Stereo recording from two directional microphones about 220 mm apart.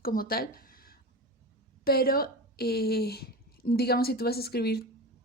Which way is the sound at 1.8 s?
45° left (ahead or behind).